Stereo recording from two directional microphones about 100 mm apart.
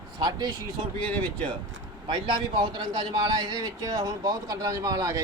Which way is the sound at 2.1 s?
50° right (ahead or behind).